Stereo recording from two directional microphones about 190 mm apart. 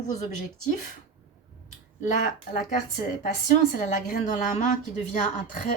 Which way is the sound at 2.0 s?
40° left (ahead or behind).